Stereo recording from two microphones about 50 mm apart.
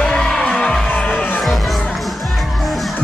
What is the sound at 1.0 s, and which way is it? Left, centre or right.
Music, left.